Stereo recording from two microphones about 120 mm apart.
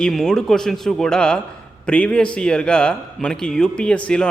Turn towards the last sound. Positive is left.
turn(degrees=10)  # may be behind; listen again after turning